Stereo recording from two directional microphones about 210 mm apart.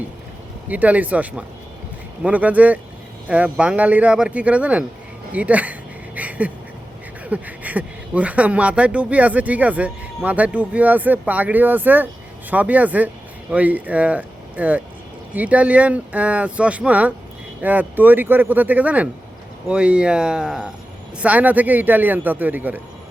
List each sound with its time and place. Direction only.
0.7 s speech: 5° right (ahead or behind)
6.1 s a sound: 5° right (ahead or behind)
7.3 s speech: 5° right (ahead or behind)